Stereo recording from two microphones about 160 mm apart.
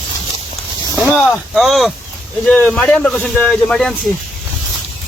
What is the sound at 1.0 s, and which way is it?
Speech, 10° left (ahead or behind).